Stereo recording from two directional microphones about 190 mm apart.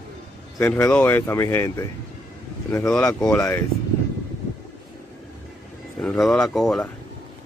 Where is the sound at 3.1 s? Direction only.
5° left (ahead or behind).